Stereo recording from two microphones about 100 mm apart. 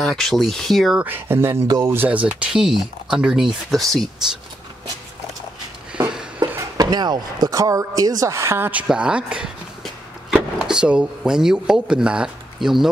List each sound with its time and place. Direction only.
0.0 s speech: centre (ahead or behind)
0.9 s speech: 20° right (ahead or behind); by 4.1 s 5° left (ahead or behind)
6.4 s chopping: 25° right (ahead or behind)
6.8 s speech: 45° right (ahead or behind); by 8.8 s 20° right (ahead or behind)
8.8 s speech: 10° right (ahead or behind)